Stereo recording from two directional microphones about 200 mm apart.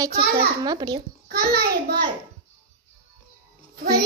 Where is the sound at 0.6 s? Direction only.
20° right (ahead or behind).